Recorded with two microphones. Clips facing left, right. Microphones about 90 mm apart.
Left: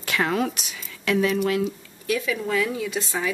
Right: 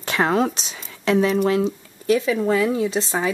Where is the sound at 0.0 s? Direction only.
30° right (ahead or behind).